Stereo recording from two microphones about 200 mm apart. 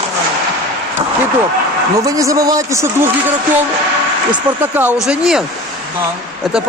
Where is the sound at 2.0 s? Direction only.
15° right (ahead or behind).